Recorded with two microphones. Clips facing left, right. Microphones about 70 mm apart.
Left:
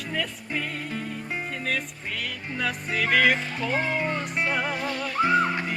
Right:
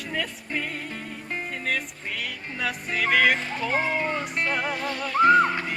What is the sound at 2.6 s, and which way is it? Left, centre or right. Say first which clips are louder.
Music: even; centre.